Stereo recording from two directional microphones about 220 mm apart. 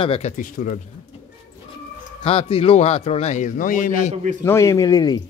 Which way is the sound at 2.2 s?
25° left (ahead or behind).